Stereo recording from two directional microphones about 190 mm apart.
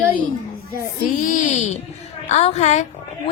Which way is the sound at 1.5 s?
35° left (ahead or behind).